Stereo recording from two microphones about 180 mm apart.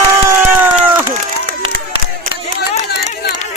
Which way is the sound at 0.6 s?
10° right (ahead or behind).